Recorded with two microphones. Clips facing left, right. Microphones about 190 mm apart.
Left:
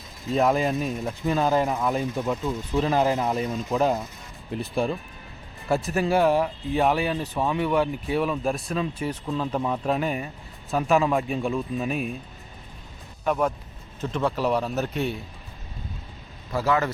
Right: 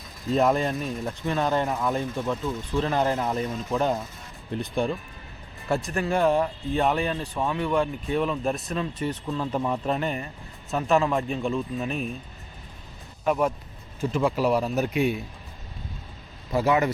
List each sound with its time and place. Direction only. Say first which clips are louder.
0.3 s speech: left 1 dB; centre (ahead or behind)
13.2 s speech: even; 5° right (ahead or behind)
16.5 s a man's voice: right 2 dB; 20° right (ahead or behind)